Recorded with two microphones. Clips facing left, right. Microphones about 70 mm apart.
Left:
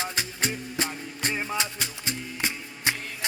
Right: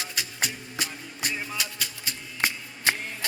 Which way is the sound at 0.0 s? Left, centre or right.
Left.